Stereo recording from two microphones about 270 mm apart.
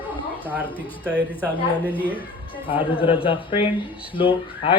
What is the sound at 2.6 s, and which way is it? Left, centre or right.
A man's voice, centre.